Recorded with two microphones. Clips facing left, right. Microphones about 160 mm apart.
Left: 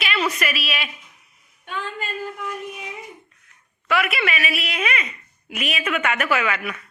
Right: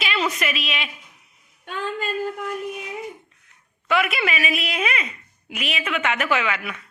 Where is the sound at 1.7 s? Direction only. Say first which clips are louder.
Right 3 dB; 40° right (ahead or behind).